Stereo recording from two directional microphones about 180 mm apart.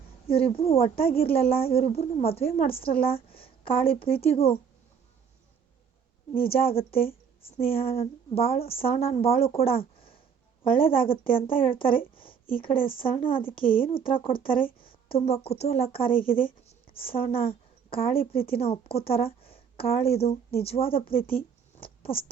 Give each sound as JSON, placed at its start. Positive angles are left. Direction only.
{"t": 0.3, "sound": "a woman's voice", "side_deg": 30}
{"t": 1.0, "sound": "a woman's voice", "side_deg": 55}
{"t": 1.3, "sound": "a woman's voice", "side_deg": 30}
{"t": 6.3, "sound": "a woman's voice", "side_deg": 30}
{"t": 16.4, "sound": "writing", "side_deg": 30}
{"t": 17.3, "sound": "a woman's voice", "side_deg": 30}